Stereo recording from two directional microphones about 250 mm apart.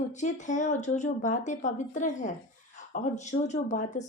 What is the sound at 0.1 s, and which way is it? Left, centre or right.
Speech, left.